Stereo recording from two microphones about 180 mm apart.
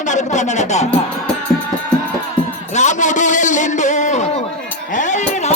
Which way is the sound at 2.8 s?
40° left (ahead or behind).